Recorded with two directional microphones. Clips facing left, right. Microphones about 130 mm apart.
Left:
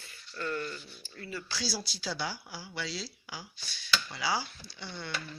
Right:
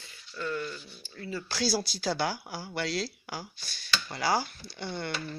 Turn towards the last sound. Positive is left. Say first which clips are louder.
# right 7 dB
turn(degrees=-55)  # may be behind; listen again after turning